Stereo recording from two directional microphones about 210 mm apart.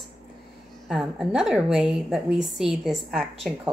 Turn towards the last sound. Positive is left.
turn(degrees=0)  # may be behind; listen again after turning